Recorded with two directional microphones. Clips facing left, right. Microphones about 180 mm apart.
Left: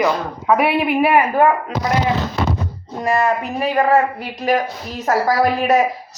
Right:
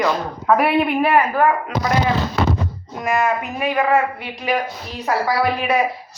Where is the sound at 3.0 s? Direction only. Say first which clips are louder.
Left 2 dB; 35° left (ahead or behind).